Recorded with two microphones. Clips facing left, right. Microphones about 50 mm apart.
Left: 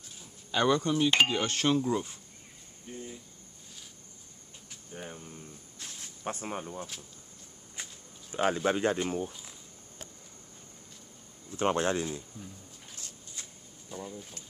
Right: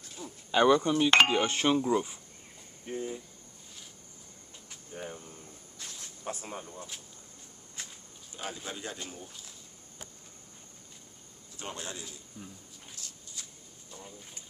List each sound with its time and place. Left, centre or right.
0.5 s a sound: centre
2.9 s speech: right
4.9 s speech: centre
5.8 s a sound: left
8.3 s speech: left
11.5 s speech: left
12.9 s shuffle: left